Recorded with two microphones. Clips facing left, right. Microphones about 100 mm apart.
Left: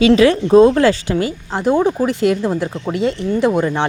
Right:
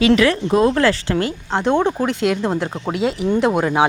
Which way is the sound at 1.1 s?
5° left (ahead or behind).